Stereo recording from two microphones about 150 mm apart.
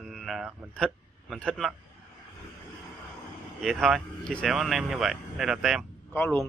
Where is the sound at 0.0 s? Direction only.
Centre (ahead or behind).